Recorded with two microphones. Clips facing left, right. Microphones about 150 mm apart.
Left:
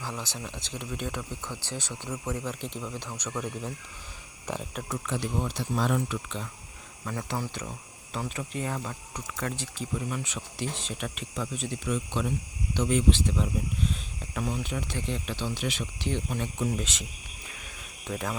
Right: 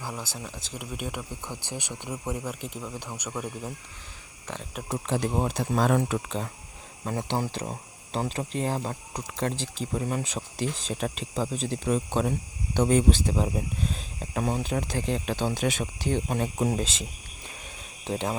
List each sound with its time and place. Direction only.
0.0 s speech: 10° right (ahead or behind)
4.4 s speech: 10° left (ahead or behind)
4.9 s speech: 30° right (ahead or behind)
7.0 s speech: 30° right (ahead or behind)
9.9 s speech: 40° right (ahead or behind)